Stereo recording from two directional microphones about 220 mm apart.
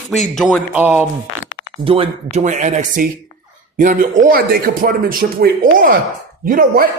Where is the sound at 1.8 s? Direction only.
25° right (ahead or behind).